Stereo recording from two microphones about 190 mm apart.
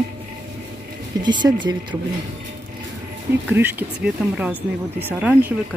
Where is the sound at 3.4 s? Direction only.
10° right (ahead or behind).